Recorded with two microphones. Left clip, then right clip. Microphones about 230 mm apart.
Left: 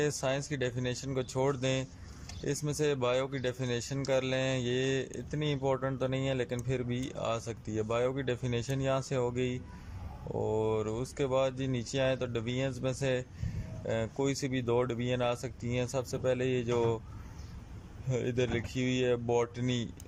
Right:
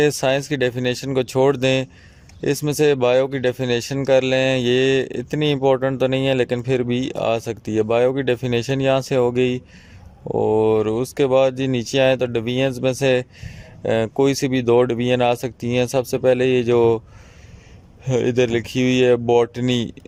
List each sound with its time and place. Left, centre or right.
0.0 s speech: right
18.0 s speech: right